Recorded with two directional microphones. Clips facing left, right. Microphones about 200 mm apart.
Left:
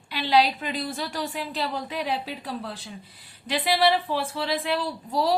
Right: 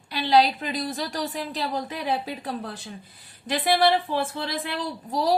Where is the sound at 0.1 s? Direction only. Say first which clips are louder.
Right 2 dB; 40° right (ahead or behind).